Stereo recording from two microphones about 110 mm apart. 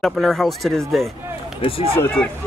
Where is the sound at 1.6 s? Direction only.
55° left (ahead or behind).